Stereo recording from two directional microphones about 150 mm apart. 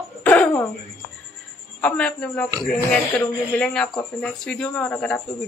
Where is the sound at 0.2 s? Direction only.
10° left (ahead or behind).